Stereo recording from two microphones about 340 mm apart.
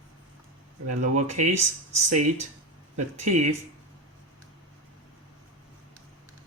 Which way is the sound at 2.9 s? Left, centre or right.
Centre.